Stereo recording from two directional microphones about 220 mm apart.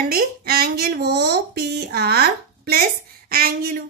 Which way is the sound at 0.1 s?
45° right (ahead or behind).